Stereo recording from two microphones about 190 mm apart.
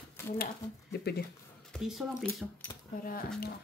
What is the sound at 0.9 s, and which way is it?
Speech, 55° left (ahead or behind).